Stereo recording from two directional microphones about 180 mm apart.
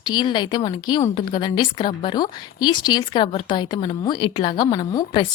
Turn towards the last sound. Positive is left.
turn(degrees=25)  # may be behind; listen again after turning